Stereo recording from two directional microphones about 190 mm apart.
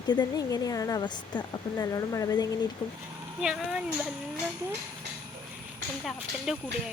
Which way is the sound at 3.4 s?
5° right (ahead or behind).